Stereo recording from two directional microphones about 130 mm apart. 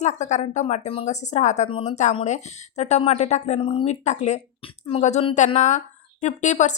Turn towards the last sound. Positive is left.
turn(degrees=65)  # may be behind; listen again after turning